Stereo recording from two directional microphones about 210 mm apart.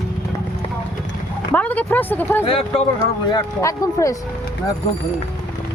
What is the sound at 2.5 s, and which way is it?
Speech, 25° left (ahead or behind).